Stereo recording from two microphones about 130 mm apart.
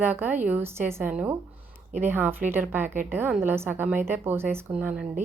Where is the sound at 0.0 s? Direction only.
15° right (ahead or behind).